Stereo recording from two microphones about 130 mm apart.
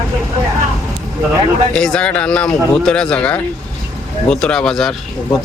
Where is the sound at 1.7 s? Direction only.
5° left (ahead or behind).